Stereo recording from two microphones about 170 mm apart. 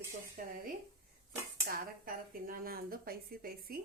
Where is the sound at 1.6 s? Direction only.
60° right (ahead or behind).